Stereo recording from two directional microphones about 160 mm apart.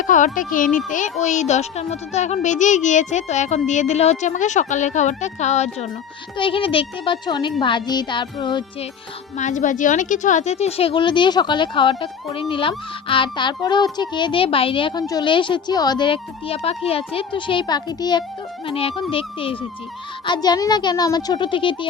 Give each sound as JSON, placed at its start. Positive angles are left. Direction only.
{"t": 0.0, "sound": "a child's voice", "side_deg": 55}
{"t": 6.3, "sound": "a woman's voice", "side_deg": 35}
{"t": 9.4, "sound": "a woman's voice", "side_deg": 50}
{"t": 18.6, "sound": "a woman's voice", "side_deg": 35}